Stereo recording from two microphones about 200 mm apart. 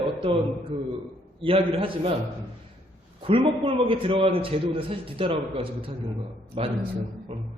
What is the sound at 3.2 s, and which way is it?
A man's voice, 25° right (ahead or behind).